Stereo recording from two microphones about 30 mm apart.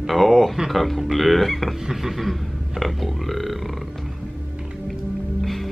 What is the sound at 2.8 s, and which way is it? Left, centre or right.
Speech, centre.